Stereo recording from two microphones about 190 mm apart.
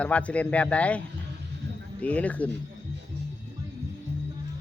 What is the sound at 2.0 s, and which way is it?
Speech, 5° left (ahead or behind).